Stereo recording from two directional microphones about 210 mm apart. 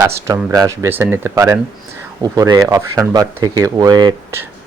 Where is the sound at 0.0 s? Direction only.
15° right (ahead or behind).